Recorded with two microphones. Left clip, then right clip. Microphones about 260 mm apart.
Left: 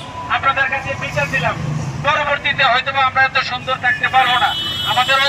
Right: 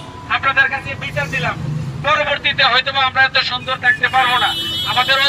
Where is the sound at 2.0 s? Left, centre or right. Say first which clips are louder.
Right 1 dB; centre.